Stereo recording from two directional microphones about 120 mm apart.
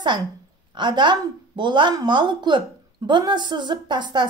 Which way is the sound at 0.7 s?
40° right (ahead or behind).